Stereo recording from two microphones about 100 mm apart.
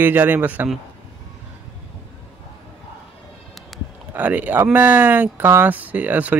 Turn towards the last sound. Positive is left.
turn(degrees=-15)  # may be behind; listen again after turning